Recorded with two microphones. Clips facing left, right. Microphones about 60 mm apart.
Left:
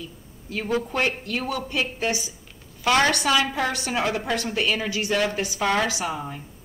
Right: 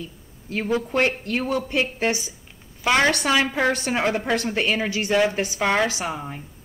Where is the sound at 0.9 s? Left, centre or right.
Right.